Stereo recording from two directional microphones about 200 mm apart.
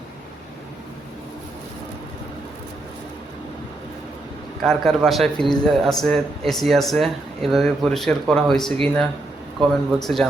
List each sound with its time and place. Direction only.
4.6 s a man's voice: centre (ahead or behind)